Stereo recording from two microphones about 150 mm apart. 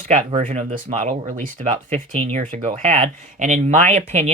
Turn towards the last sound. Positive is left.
turn(degrees=-50)  # may be behind; listen again after turning